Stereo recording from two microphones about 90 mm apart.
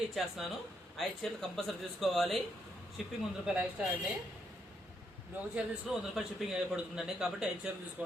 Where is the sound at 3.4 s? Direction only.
15° right (ahead or behind).